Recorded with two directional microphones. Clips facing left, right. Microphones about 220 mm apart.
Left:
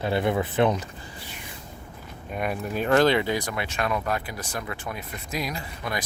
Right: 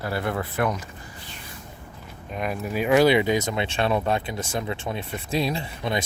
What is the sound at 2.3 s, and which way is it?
Speech, centre (ahead or behind).